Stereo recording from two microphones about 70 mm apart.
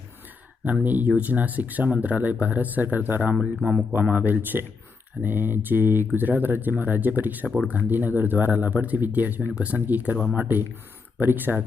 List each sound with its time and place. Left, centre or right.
0.6 s speech: right
3.3 s speech: centre
4.0 s speech: right